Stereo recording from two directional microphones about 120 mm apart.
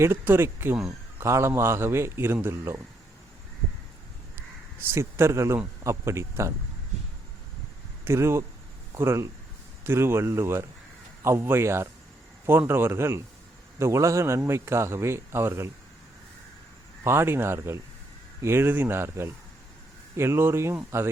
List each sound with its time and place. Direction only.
0.0 s speech: 20° right (ahead or behind)
4.4 s crow: 20° right (ahead or behind)
5.8 s speech: 25° right (ahead or behind)
8.0 s speech: 20° right (ahead or behind)
17.0 s speech: 20° right (ahead or behind)